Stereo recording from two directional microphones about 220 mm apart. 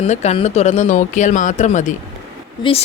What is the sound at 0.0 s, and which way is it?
A woman's voice, 30° left (ahead or behind).